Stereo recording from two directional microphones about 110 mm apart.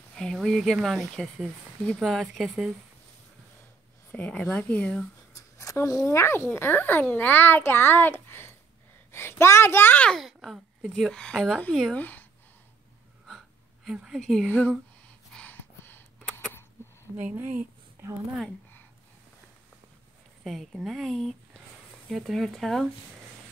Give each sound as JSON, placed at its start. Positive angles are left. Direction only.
{"t": 0.1, "sound": "speech", "side_deg": 5}
{"t": 4.1, "sound": "a child's voice", "side_deg": 10}
{"t": 5.3, "sound": "a sound", "side_deg": 30}
{"t": 6.0, "sound": "a child's voice", "side_deg": 25}
{"t": 10.1, "sound": "speech", "side_deg": 0}
{"t": 11.9, "sound": "speech", "side_deg": 15}
{"t": 13.8, "sound": "speech", "side_deg": -5}
{"t": 15.3, "sound": "a sound", "side_deg": 15}
{"t": 17.2, "sound": "speech", "side_deg": -15}
{"t": 20.4, "sound": "speech", "side_deg": 0}